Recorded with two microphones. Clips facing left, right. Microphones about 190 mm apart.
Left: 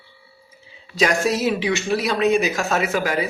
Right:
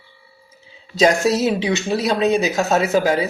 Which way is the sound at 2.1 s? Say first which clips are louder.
Right 1 dB; 35° right (ahead or behind).